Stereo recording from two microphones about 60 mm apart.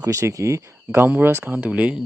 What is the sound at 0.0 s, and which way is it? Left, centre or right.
Speech, right.